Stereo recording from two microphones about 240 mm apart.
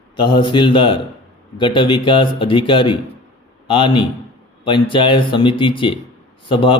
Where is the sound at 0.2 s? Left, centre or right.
Centre.